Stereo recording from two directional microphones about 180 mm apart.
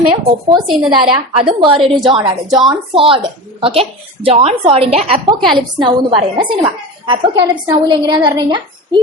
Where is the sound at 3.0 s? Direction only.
30° right (ahead or behind).